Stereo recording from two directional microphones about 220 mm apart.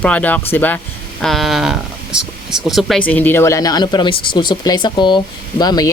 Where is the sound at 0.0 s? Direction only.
5° left (ahead or behind).